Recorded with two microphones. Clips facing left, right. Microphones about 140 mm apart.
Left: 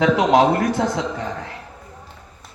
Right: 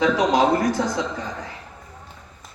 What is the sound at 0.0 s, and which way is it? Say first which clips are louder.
Speech: left 3 dB; 60° left (ahead or behind).